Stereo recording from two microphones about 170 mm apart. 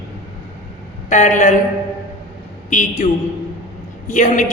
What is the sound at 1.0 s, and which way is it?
Speech, 45° left (ahead or behind).